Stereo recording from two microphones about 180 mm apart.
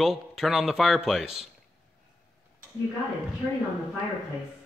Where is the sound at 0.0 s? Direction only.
Centre (ahead or behind).